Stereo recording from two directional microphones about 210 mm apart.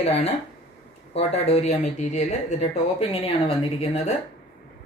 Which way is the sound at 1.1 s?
30° left (ahead or behind).